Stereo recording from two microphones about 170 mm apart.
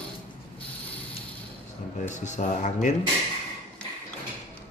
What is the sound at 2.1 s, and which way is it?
Speech, 45° left (ahead or behind).